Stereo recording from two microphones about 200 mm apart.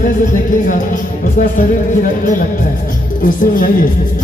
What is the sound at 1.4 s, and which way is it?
Music, 40° left (ahead or behind).